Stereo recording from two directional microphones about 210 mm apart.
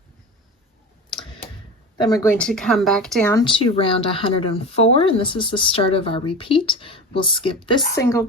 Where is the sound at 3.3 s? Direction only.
25° left (ahead or behind).